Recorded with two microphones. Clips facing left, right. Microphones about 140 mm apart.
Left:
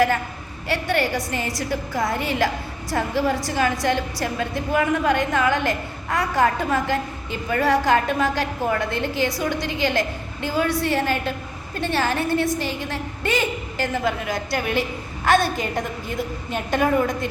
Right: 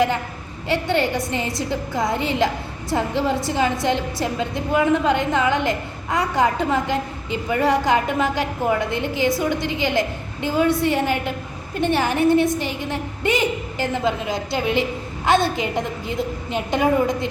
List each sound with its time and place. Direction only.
0.7 s a woman's voice: 20° right (ahead or behind)